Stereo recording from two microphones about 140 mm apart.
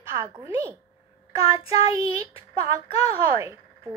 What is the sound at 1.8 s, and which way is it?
Speech, 25° right (ahead or behind).